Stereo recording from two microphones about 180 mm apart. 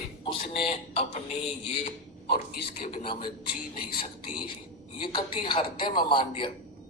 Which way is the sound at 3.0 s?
25° left (ahead or behind).